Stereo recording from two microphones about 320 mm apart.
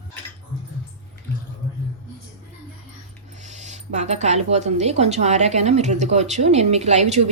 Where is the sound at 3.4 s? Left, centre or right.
Right.